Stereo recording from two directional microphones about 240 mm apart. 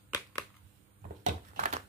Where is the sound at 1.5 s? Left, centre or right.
Right.